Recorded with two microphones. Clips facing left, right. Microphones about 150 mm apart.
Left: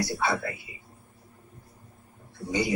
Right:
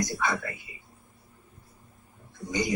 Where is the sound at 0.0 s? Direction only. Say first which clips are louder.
Left 2 dB; 30° left (ahead or behind).